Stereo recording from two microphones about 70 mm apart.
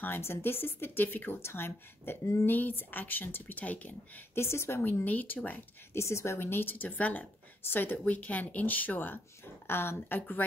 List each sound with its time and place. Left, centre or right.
0.0 s speech: left
4.4 s speech: left
5.0 s speech: left
5.9 s speech: left